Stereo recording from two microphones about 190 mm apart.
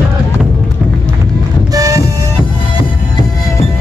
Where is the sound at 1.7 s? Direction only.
15° right (ahead or behind).